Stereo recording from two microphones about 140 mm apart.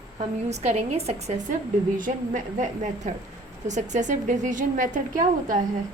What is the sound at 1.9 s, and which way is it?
A woman's voice, 70° right (ahead or behind).